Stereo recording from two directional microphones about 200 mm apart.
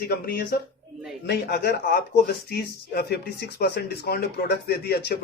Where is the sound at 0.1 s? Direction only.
50° left (ahead or behind).